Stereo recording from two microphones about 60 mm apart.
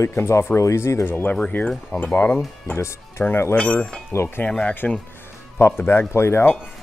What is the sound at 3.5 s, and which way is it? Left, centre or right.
Speech, left.